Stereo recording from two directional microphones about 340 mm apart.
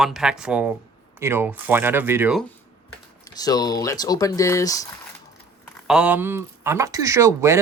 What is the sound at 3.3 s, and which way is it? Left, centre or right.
Speech, centre.